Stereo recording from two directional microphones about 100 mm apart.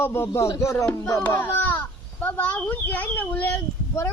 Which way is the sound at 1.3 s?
20° left (ahead or behind).